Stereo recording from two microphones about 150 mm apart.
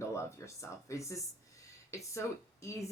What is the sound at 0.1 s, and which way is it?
Speech, 20° left (ahead or behind).